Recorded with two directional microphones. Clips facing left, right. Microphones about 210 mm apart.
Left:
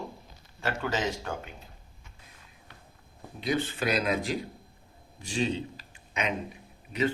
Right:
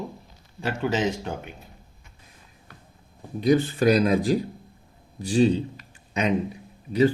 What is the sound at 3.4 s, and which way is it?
Speech, 40° right (ahead or behind).